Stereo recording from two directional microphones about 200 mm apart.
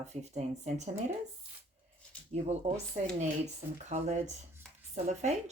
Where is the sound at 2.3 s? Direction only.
35° right (ahead or behind).